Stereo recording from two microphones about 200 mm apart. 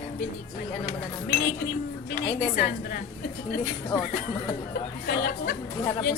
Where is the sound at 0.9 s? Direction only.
40° left (ahead or behind).